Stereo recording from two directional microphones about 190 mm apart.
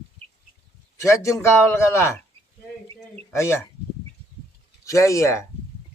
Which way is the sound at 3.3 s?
15° left (ahead or behind).